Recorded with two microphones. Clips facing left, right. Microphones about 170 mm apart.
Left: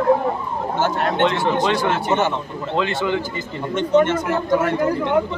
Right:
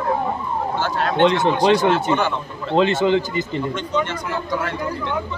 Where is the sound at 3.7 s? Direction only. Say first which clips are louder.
Left 7 dB; 50° left (ahead or behind).